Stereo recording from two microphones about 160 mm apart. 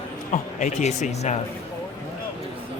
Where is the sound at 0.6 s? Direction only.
50° left (ahead or behind).